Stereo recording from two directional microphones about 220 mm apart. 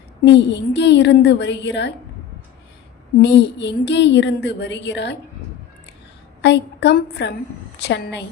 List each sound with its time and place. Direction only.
0.3 s a woman's voice: 50° left (ahead or behind)
3.2 s a woman's voice: 50° left (ahead or behind)
6.4 s a woman's voice: 50° left (ahead or behind)